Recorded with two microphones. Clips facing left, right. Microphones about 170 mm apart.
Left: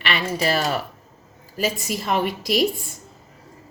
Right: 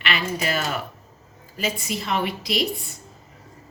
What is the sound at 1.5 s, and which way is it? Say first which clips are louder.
Speech: left 3 dB; 45° left (ahead or behind).